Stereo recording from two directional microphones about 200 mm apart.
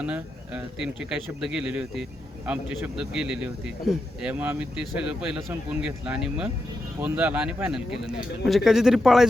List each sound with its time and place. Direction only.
0.0 s speech: 5° right (ahead or behind)